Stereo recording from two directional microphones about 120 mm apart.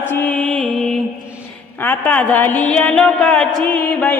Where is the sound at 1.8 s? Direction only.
15° left (ahead or behind).